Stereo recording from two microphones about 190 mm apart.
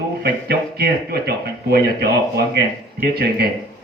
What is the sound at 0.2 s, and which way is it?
Speech, 60° right (ahead or behind).